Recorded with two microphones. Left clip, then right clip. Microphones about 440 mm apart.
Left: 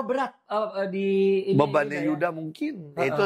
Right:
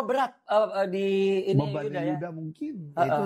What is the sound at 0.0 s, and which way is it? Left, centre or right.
Speech, right.